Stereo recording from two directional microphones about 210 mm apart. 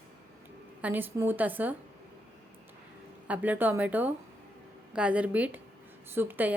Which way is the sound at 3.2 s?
5° right (ahead or behind).